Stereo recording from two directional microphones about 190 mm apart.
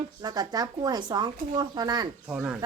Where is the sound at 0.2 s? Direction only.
20° right (ahead or behind).